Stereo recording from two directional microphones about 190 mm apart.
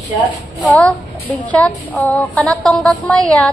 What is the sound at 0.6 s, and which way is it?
A child's voice, 5° left (ahead or behind).